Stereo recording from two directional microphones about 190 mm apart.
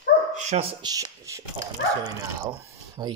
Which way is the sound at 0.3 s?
40° right (ahead or behind).